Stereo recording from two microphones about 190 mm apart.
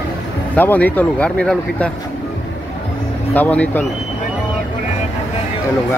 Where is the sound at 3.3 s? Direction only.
5° left (ahead or behind).